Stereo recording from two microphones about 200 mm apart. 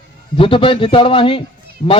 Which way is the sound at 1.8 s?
40° left (ahead or behind).